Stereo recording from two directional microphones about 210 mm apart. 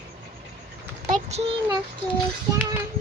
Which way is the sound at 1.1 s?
30° right (ahead or behind).